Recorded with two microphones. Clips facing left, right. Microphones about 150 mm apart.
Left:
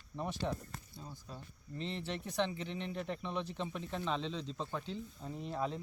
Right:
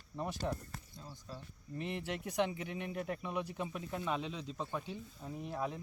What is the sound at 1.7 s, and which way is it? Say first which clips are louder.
Speech: right 1 dB; 15° right (ahead or behind).